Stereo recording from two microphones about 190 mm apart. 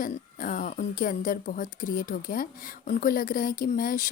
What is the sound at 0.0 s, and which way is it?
Speech, 45° left (ahead or behind).